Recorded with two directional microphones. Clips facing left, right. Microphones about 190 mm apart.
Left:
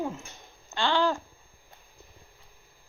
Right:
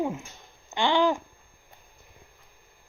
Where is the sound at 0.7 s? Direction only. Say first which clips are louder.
Right 3 dB; 15° right (ahead or behind).